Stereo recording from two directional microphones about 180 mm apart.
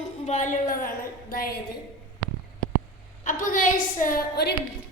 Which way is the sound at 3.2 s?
45° left (ahead or behind).